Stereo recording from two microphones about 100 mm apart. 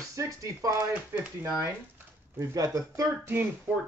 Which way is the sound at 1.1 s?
15° right (ahead or behind).